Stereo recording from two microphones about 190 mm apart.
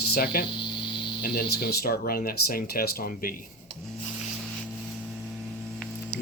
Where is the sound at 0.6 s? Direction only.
25° left (ahead or behind).